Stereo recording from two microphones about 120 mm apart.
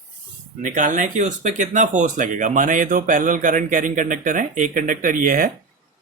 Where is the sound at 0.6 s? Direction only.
90° right.